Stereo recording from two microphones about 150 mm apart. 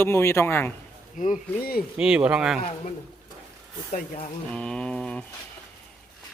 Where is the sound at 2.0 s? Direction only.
5° right (ahead or behind).